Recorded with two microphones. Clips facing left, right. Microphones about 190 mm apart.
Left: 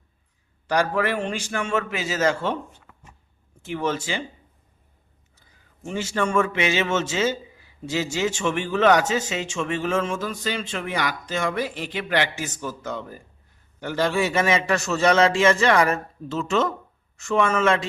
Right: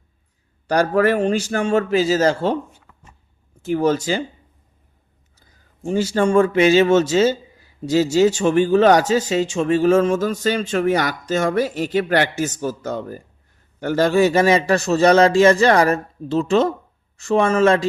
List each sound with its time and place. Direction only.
0.7 s speech: 45° right (ahead or behind)
3.6 s speech: 40° right (ahead or behind)
5.8 s speech: 35° right (ahead or behind)